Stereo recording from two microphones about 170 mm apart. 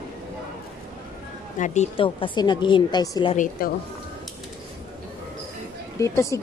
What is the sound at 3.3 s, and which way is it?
Speech, 50° left (ahead or behind).